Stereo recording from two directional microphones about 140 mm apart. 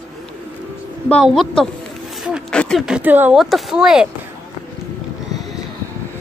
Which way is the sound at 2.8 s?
10° right (ahead or behind).